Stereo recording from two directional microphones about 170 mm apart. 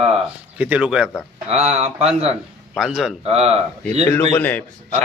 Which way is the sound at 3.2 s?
35° right (ahead or behind).